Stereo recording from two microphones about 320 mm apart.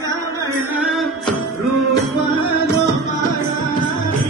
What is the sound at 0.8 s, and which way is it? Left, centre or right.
Music, centre.